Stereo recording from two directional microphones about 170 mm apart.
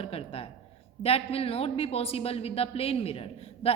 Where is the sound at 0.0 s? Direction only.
35° left (ahead or behind).